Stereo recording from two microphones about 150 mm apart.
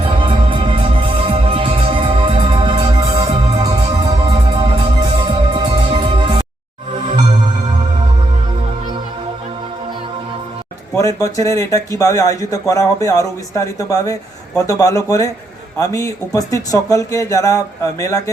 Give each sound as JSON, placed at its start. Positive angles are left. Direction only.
{"t": 0.0, "sound": "music", "side_deg": -35}
{"t": 10.9, "sound": "speech", "side_deg": 20}